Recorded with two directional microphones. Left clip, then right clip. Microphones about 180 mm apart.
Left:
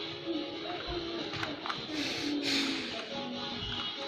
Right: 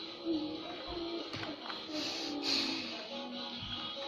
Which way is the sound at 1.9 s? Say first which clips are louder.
Left 2 dB; 20° right (ahead or behind).